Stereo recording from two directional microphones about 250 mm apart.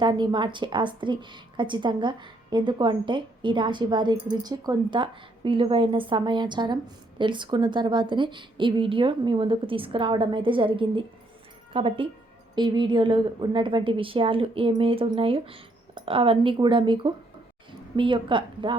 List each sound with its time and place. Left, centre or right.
0.0 s a woman's voice: centre